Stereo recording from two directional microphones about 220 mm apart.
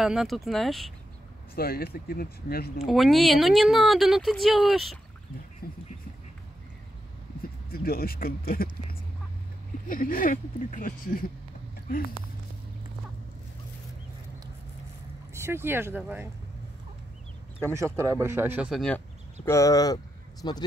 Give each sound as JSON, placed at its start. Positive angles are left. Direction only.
{"t": 0.0, "sound": "speech", "side_deg": 0}
{"t": 1.5, "sound": "speech", "side_deg": 45}
{"t": 2.8, "sound": "speech", "side_deg": 0}
{"t": 5.6, "sound": "speech", "side_deg": 45}
{"t": 7.7, "sound": "speech", "side_deg": 40}
{"t": 9.8, "sound": "speech", "side_deg": 40}
{"t": 15.3, "sound": "speech", "side_deg": -10}
{"t": 17.7, "sound": "speech", "side_deg": -15}
{"t": 19.4, "sound": "speech", "side_deg": 15}